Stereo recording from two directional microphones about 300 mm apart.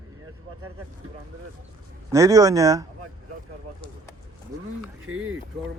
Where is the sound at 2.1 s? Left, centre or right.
Centre.